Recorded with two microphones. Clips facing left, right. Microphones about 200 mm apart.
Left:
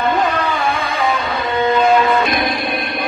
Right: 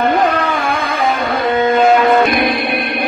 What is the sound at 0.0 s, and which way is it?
Music, 55° right (ahead or behind).